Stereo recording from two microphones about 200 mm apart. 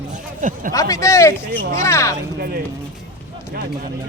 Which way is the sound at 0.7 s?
15° left (ahead or behind).